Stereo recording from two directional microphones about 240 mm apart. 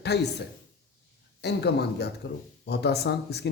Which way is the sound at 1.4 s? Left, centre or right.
Left.